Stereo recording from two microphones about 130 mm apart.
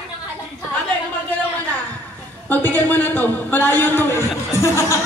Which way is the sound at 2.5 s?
15° left (ahead or behind).